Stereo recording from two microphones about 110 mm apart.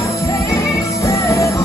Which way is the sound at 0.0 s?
25° left (ahead or behind).